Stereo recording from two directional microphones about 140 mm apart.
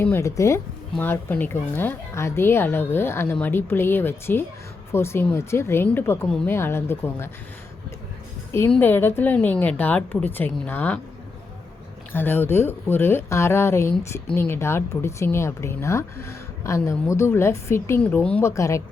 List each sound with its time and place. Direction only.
0.0 s speech: 20° left (ahead or behind)
8.7 s speech: 15° left (ahead or behind)
12.1 s speech: 15° left (ahead or behind)
18.5 s speech: 20° left (ahead or behind)